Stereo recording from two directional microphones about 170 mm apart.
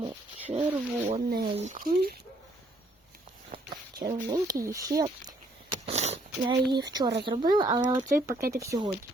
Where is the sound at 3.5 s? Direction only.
25° right (ahead or behind).